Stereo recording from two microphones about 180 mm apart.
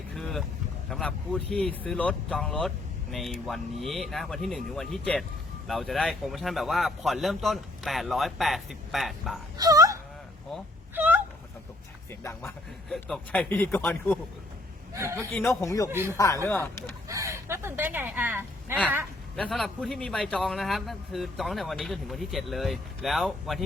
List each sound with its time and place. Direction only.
0.1 s vehicle: centre (ahead or behind)
0.9 s speech: 5° left (ahead or behind)
9.6 s a sound: 20° right (ahead or behind)
12.2 s speech: 15° left (ahead or behind)
12.9 s speech: 5° left (ahead or behind)
14.9 s a man's voice: 15° right (ahead or behind)
15.3 s speech: 10° left (ahead or behind)
15.9 s a man's voice: 15° right (ahead or behind)
16.1 s speech: 15° left (ahead or behind)
17.1 s a sound: 20° right (ahead or behind)
19.4 s speech: centre (ahead or behind)